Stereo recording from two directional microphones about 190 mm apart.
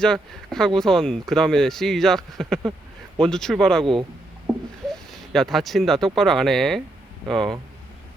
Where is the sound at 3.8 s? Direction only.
25° right (ahead or behind).